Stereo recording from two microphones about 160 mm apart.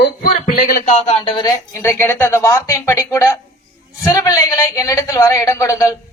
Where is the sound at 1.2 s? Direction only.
30° left (ahead or behind).